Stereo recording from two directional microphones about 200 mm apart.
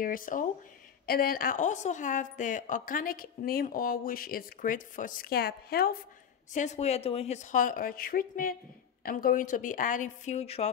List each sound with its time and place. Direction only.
0.0 s a woman's voice: 45° left (ahead or behind)
6.5 s a woman's voice: 35° left (ahead or behind)